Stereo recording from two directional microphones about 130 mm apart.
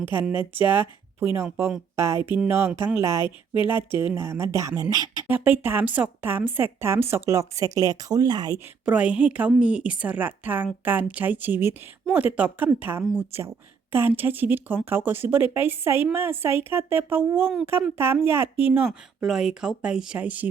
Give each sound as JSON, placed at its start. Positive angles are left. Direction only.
{"t": 0.1, "sound": "a woman's voice", "side_deg": -15}
{"t": 5.3, "sound": "speech", "side_deg": -15}
{"t": 8.5, "sound": "a woman's voice", "side_deg": -15}
{"t": 18.9, "sound": "speech", "side_deg": -5}